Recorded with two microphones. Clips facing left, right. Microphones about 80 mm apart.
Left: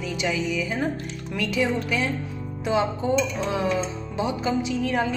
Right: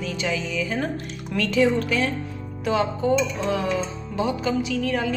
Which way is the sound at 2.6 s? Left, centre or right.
Left.